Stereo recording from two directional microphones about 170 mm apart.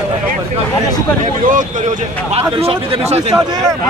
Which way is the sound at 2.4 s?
30° right (ahead or behind).